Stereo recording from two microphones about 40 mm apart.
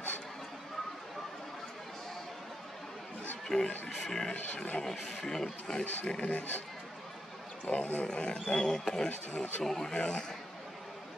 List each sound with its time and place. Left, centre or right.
3.4 s speech: centre
7.7 s speech: left
8.5 s speech: centre
9.1 s speech: left
9.6 s speech: centre